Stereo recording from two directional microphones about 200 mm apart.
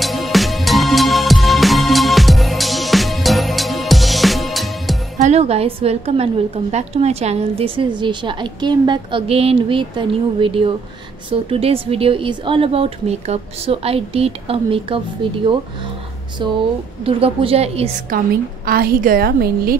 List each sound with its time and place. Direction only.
0.0 s music: centre (ahead or behind)
5.2 s a woman's voice: 30° right (ahead or behind)
16.4 s a woman's voice: 25° right (ahead or behind)
18.1 s a woman's voice: 45° right (ahead or behind)